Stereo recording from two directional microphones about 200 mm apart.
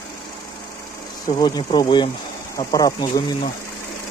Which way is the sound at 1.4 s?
20° left (ahead or behind).